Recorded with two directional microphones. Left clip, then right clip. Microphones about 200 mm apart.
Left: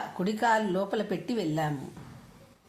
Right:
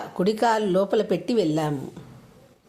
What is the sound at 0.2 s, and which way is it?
A woman's voice, 50° right (ahead or behind).